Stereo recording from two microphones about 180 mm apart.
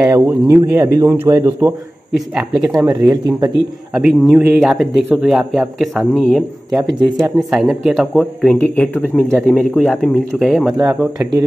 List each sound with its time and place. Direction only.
0.1 s speech: 10° right (ahead or behind)
2.1 s speech: centre (ahead or behind)
2.9 s speech: 20° right (ahead or behind)
4.0 s speech: 5° right (ahead or behind)